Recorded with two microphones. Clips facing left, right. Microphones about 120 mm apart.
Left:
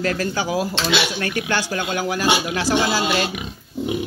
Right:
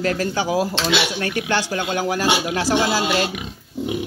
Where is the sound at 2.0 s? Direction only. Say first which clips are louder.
Left 1 dB; 35° right (ahead or behind).